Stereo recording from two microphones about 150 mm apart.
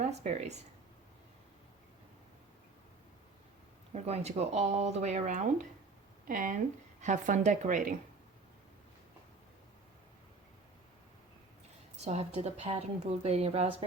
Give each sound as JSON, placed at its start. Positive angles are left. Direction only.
{"t": 0.0, "sound": "speech", "side_deg": -50}
{"t": 3.9, "sound": "a woman's voice", "side_deg": -45}
{"t": 6.2, "sound": "speech", "side_deg": -65}
{"t": 12.0, "sound": "a woman's voice", "side_deg": -45}